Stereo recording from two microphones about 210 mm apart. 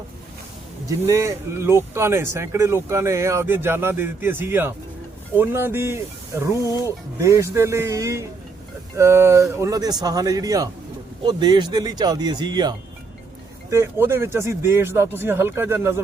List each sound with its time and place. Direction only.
0.9 s speech: 15° right (ahead or behind)